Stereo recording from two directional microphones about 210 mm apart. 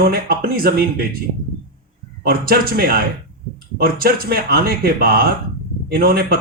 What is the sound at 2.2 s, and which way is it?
Speech, 45° right (ahead or behind).